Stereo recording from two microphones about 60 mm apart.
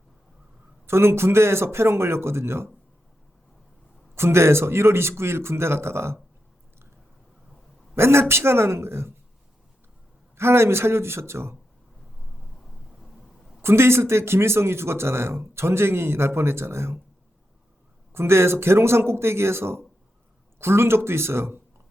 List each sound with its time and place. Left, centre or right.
0.9 s speech: right
4.1 s speech: right
7.9 s speech: right
10.3 s speech: right
13.6 s speech: right
18.1 s speech: right